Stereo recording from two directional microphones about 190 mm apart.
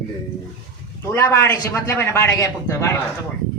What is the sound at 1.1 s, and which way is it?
A man's voice, 15° left (ahead or behind).